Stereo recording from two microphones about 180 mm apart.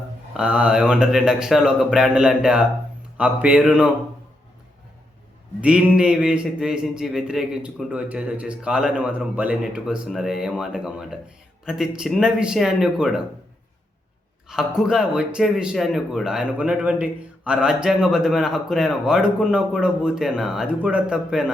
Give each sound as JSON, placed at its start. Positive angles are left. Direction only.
{"t": 0.3, "sound": "speech", "side_deg": -5}
{"t": 5.5, "sound": "speech", "side_deg": -5}
{"t": 14.4, "sound": "speech", "side_deg": -5}